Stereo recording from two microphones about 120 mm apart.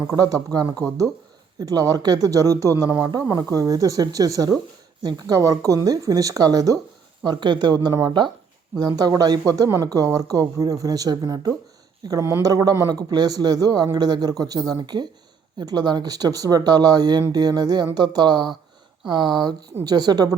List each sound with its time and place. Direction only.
0.1 s a man's voice: 30° right (ahead or behind)